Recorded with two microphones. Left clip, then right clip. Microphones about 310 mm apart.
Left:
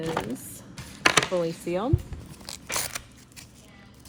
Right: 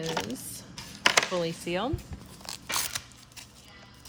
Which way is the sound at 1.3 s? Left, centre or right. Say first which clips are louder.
Left 3 dB; right.